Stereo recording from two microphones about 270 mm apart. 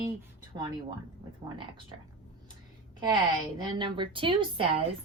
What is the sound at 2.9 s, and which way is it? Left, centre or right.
A woman's voice, centre.